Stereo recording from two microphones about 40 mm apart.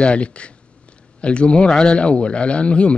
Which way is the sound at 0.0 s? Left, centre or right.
Left.